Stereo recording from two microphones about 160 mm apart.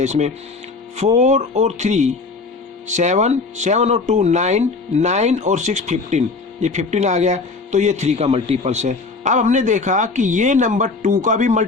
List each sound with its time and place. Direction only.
0.0 s speech: 45° right (ahead or behind)